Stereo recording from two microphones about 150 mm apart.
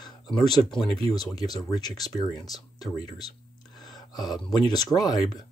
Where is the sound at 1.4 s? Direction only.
25° left (ahead or behind).